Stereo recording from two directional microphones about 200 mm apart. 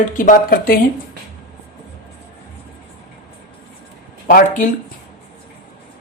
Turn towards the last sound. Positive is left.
turn(degrees=45)  # may be behind; listen again after turning